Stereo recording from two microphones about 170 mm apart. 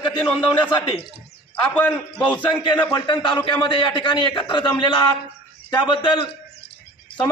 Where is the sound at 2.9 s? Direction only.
30° left (ahead or behind).